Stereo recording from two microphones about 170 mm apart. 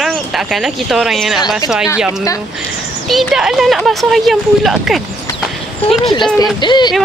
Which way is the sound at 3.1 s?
Centre (ahead or behind).